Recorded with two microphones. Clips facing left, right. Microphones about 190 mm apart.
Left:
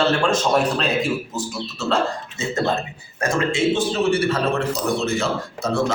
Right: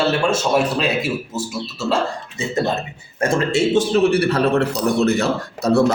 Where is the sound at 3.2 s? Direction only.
30° right (ahead or behind).